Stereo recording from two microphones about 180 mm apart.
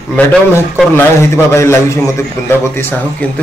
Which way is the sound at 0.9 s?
15° left (ahead or behind).